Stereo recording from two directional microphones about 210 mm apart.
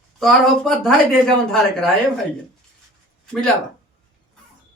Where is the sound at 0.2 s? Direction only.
Centre (ahead or behind).